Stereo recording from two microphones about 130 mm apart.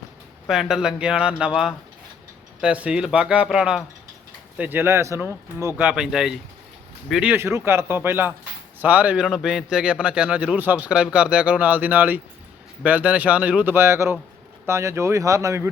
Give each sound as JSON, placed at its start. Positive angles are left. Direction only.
{"t": 0.4, "sound": "a man's voice", "side_deg": 0}
{"t": 5.7, "sound": "a man's voice", "side_deg": -10}
{"t": 7.3, "sound": "a man's voice", "side_deg": -20}